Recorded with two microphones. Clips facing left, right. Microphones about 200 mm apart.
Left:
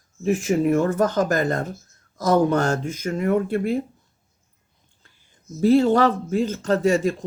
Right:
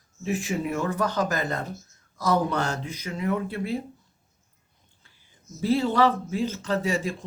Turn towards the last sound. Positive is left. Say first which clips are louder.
# left 7 dB
turn(degrees=45)  # may be behind; listen again after turning